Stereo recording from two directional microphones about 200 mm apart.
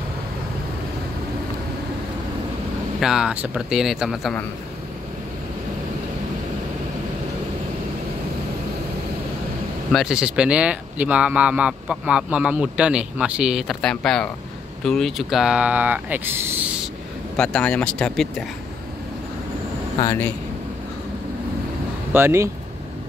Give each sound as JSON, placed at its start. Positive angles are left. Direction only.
{"t": 3.0, "sound": "speech", "side_deg": 0}
{"t": 9.9, "sound": "speech", "side_deg": -5}
{"t": 17.4, "sound": "speech", "side_deg": 5}
{"t": 20.0, "sound": "speech", "side_deg": 20}
{"t": 22.1, "sound": "speech", "side_deg": -10}